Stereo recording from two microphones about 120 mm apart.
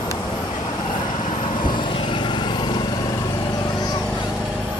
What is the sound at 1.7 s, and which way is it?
Vehicle, 40° left (ahead or behind).